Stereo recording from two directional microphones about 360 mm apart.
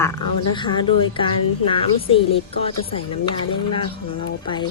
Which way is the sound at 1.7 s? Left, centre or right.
Centre.